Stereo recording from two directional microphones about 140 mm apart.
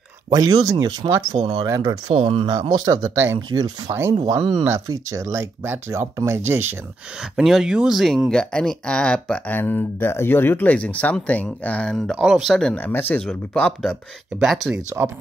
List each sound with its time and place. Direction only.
0.3 s speech: 25° right (ahead or behind)
1.3 s speech: 40° right (ahead or behind)
1.6 s speech: 25° right (ahead or behind); by 2.5 s 40° right (ahead or behind)
2.8 s speech: 30° right (ahead or behind)
7.2 s speech: 5° right (ahead or behind)
15.0 s speech: 15° right (ahead or behind)